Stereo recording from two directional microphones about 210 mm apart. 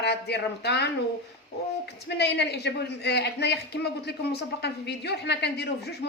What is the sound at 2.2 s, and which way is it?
A man's voice, 55° left (ahead or behind).